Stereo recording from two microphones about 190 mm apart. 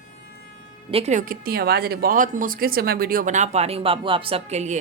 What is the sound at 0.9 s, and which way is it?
A woman's voice, 35° right (ahead or behind).